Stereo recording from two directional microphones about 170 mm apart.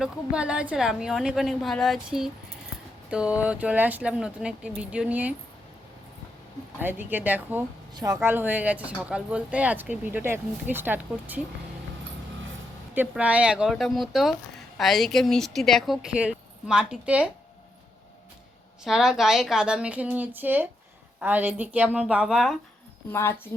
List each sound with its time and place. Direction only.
0.0 s speech: 5° right (ahead or behind)
6.7 s speech: 10° right (ahead or behind)
12.9 s speech: 10° right (ahead or behind)
18.9 s speech: 5° right (ahead or behind)